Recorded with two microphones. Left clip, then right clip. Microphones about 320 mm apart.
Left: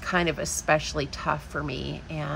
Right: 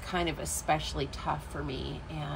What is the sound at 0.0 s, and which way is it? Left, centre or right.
A woman's voice, left.